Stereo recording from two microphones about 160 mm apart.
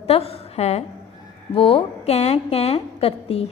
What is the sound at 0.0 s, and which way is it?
A woman's voice, 40° left (ahead or behind).